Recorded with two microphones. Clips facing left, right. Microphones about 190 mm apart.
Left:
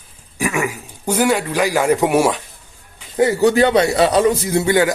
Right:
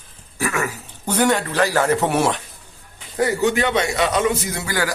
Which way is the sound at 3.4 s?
35° left (ahead or behind).